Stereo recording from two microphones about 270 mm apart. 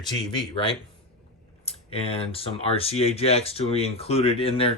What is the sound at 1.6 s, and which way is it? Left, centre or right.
Speech, left.